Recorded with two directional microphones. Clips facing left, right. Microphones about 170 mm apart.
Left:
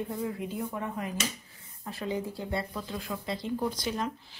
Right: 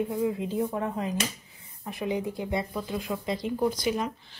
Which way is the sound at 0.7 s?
25° right (ahead or behind).